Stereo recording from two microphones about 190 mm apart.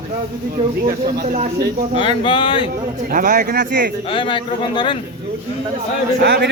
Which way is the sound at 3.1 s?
45° right (ahead or behind).